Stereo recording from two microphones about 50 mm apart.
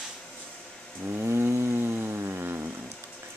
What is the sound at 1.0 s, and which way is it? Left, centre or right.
Chainsaw, right.